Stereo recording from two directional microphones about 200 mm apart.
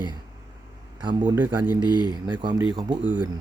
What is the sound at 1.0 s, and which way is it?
Speech, 25° right (ahead or behind).